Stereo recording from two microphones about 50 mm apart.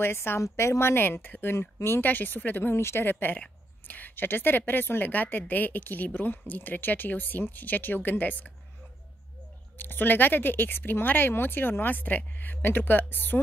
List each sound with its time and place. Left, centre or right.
0.0 s a woman's voice: left
1.0 s speech: left
2.0 s a woman's voice: left
2.7 s a woman's voice: left
3.1 s a woman's voice: left
9.8 s a woman's voice: left